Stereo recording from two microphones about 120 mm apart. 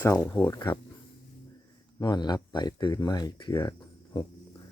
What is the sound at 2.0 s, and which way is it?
Speech, 35° left (ahead or behind).